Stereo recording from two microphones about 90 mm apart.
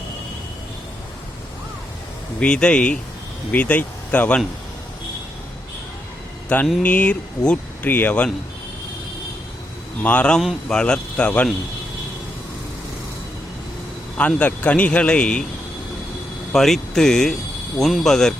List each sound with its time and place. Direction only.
2.4 s speech: 10° left (ahead or behind)
6.5 s speech: 20° left (ahead or behind)
10.0 s speech: 15° left (ahead or behind)
14.2 s speech: 15° left (ahead or behind)
16.5 s speech: 5° left (ahead or behind)